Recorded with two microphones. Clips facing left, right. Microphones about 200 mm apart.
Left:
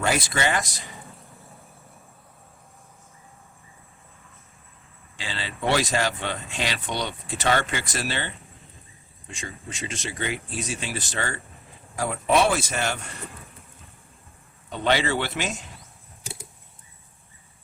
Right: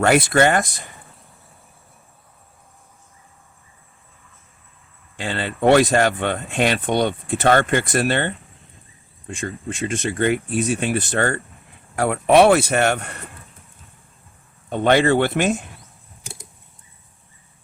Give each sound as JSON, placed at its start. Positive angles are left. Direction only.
{"t": 0.0, "sound": "speech", "side_deg": -60}
{"t": 5.1, "sound": "speech", "side_deg": -55}
{"t": 14.7, "sound": "speech", "side_deg": -55}